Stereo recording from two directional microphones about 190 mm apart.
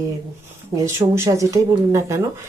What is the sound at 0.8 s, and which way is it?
Speech, 15° right (ahead or behind).